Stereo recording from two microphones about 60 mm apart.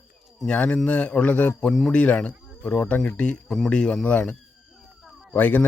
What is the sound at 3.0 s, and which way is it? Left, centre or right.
A man's voice, centre.